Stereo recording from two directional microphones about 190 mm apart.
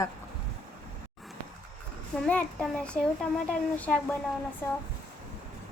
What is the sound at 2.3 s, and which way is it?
A woman's voice, 5° left (ahead or behind).